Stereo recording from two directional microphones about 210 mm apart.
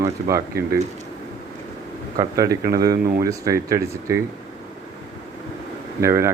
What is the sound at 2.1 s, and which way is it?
Speech, 15° right (ahead or behind).